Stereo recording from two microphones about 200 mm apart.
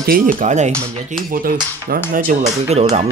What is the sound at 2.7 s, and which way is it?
Speech, 30° right (ahead or behind).